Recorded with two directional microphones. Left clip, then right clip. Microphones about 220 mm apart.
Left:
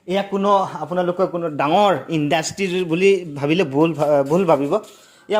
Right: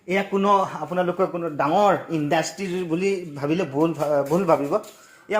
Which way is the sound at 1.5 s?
45° left (ahead or behind).